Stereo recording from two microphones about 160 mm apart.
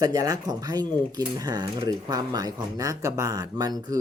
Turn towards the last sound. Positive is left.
turn(degrees=-25)  # may be behind; listen again after turning